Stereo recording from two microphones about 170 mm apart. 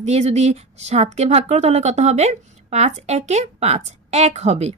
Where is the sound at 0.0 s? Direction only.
40° right (ahead or behind).